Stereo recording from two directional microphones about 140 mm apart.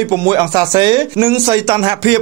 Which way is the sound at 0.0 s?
25° right (ahead or behind).